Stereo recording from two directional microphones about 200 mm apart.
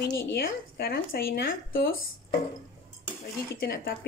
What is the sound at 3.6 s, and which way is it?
Speech, 50° left (ahead or behind).